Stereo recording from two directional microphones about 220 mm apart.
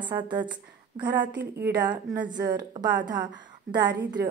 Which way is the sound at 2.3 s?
20° right (ahead or behind).